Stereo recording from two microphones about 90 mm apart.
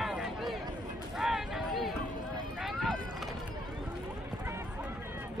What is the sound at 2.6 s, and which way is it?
Run, 5° left (ahead or behind).